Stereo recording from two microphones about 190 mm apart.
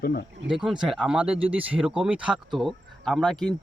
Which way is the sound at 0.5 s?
Centre (ahead or behind).